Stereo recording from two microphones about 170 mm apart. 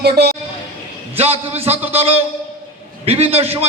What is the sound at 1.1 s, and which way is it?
A man's voice, 35° right (ahead or behind).